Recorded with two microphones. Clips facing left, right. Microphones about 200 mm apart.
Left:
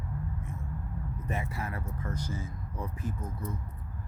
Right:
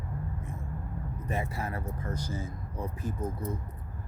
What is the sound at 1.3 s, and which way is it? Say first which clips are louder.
Speech: right 2 dB; 35° right (ahead or behind).